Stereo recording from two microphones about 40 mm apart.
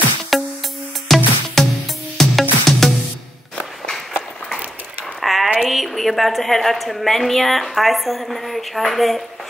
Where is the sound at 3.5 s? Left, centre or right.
Centre.